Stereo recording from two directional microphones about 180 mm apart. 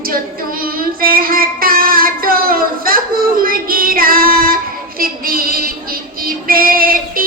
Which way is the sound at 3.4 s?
55° right (ahead or behind).